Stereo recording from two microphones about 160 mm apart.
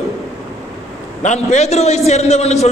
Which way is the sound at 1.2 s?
45° left (ahead or behind).